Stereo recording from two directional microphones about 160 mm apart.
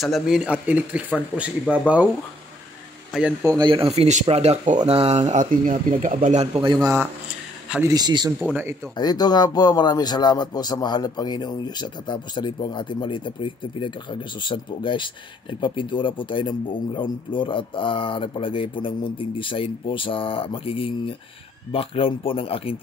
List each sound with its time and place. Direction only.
0.0 s speech: centre (ahead or behind)
3.1 s speech: 5° right (ahead or behind)
3.4 s speech: 25° right (ahead or behind)
8.9 s a man's voice: 25° left (ahead or behind)